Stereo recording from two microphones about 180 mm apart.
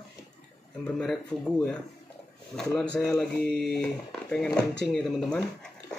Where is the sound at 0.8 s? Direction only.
5° left (ahead or behind).